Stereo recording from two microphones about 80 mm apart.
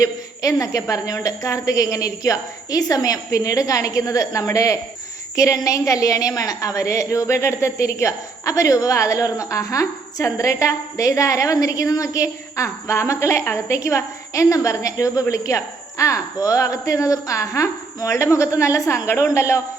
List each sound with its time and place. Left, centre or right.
0.0 s a woman's voice: left